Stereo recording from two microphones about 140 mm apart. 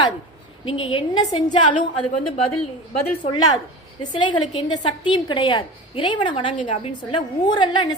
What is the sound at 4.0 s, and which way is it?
A woman's voice, 35° left (ahead or behind).